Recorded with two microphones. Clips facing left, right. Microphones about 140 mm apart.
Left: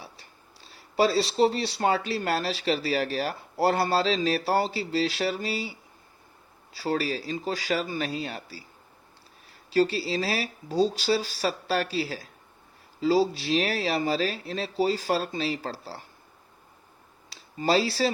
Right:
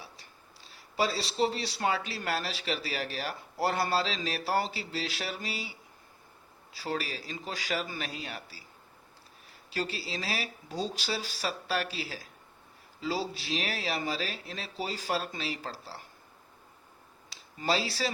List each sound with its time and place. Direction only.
0.9 s speech: 35° left (ahead or behind)
6.8 s speech: 40° left (ahead or behind)
9.6 s speech: 35° left (ahead or behind)
17.6 s speech: 35° left (ahead or behind)